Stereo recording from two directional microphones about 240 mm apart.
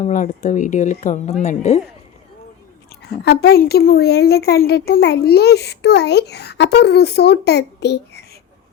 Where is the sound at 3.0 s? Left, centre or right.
Left.